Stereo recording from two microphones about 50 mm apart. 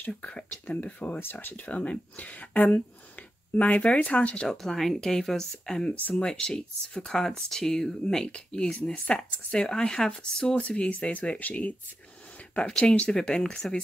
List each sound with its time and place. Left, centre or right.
0.2 s speech: left
1.2 s speech: left
1.7 s speech: left
4.5 s speech: centre
7.1 s speech: centre
8.9 s speech: left
12.5 s speech: centre